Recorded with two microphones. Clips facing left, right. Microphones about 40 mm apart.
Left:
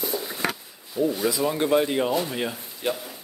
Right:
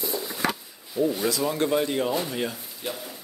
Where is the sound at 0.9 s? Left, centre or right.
Centre.